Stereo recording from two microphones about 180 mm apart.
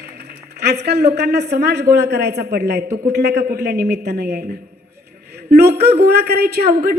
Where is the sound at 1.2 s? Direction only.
70° right (ahead or behind).